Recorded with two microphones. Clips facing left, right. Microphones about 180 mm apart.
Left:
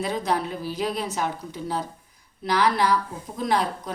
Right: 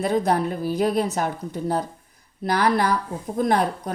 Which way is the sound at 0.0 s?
50° right (ahead or behind).